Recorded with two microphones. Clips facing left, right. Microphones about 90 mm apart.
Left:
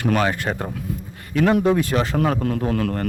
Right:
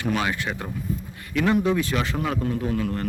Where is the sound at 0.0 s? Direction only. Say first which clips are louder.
Left 5 dB; 50° left (ahead or behind).